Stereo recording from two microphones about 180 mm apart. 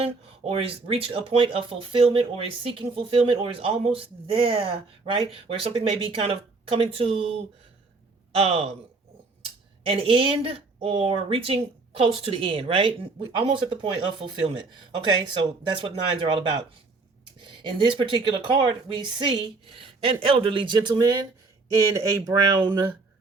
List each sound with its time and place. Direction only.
0.0 s speech: 30° right (ahead or behind)
8.4 s speech: 35° right (ahead or behind)
9.8 s speech: 30° right (ahead or behind)